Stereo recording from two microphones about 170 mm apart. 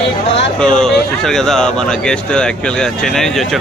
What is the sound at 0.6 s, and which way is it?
Speech, 5° left (ahead or behind).